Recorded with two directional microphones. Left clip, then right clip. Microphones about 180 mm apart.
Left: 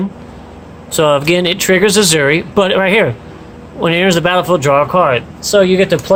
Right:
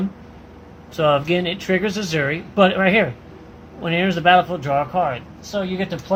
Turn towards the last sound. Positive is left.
turn(degrees=65)  # may be behind; listen again after turning